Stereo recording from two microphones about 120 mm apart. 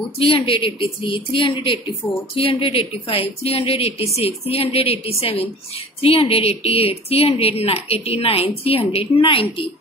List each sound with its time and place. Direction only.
0.2 s a woman's voice: 50° left (ahead or behind)